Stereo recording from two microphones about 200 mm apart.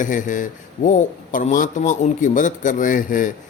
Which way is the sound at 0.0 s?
40° left (ahead or behind).